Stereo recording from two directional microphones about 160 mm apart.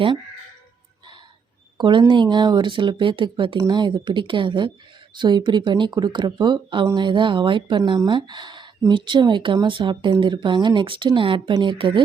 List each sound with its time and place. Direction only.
1.8 s speech: 30° right (ahead or behind)